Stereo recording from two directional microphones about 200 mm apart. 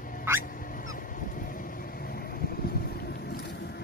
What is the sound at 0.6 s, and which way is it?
Vehicle, 45° left (ahead or behind).